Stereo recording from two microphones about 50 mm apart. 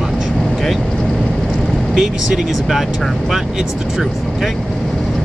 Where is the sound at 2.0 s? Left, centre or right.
Centre.